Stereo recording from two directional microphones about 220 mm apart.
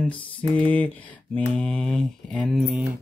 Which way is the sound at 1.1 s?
5° left (ahead or behind).